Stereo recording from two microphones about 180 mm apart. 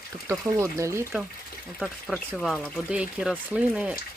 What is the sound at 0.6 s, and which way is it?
Speech, 15° right (ahead or behind).